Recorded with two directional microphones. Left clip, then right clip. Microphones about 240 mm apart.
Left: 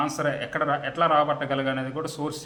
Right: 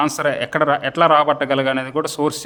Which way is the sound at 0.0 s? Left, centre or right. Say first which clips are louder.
Right 7 dB; right.